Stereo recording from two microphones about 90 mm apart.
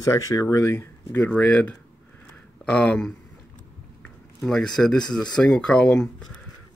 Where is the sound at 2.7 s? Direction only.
10° left (ahead or behind).